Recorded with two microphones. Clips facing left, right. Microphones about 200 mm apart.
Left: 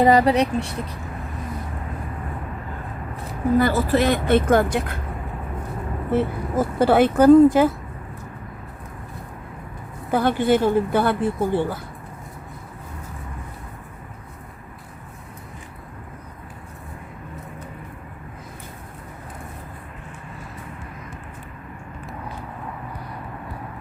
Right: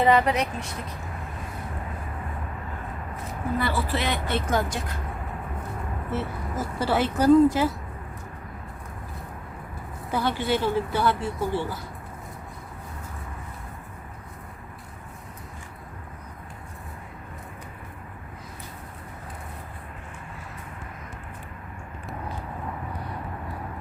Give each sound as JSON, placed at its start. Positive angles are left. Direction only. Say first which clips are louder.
{"t": 0.0, "sound": "speech", "louder": "left 5 dB", "side_deg": 40}
{"t": 3.6, "sound": "speech", "louder": "left 8 dB", "side_deg": 45}
{"t": 6.1, "sound": "speech", "louder": "left 10 dB", "side_deg": 55}
{"t": 10.1, "sound": "speech", "louder": "left 7 dB", "side_deg": 55}